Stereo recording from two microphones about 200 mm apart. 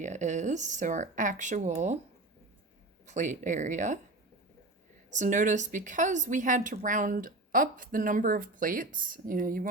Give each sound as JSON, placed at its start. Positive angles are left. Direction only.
{"t": 0.0, "sound": "a woman's voice", "side_deg": -35}
{"t": 3.1, "sound": "a woman's voice", "side_deg": -40}
{"t": 5.1, "sound": "a woman's voice", "side_deg": -40}